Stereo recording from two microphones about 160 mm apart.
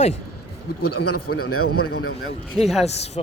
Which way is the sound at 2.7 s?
40° left (ahead or behind).